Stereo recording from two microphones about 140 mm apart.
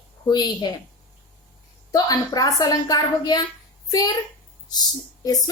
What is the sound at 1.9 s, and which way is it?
A woman's voice, 25° left (ahead or behind).